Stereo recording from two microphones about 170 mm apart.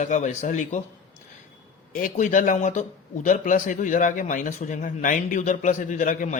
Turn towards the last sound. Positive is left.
turn(degrees=50)  # may be behind; listen again after turning